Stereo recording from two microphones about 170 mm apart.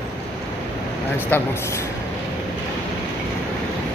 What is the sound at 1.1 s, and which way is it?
Speech, 10° left (ahead or behind).